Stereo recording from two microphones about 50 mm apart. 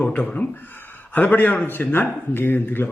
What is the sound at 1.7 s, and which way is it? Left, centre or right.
Speech, left.